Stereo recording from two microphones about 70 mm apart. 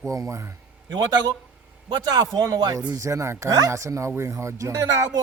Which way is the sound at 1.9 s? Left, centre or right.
Right.